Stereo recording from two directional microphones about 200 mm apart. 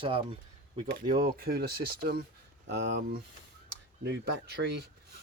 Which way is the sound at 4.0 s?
60° right (ahead or behind).